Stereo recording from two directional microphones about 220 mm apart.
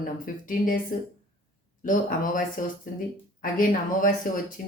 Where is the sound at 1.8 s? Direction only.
35° left (ahead or behind).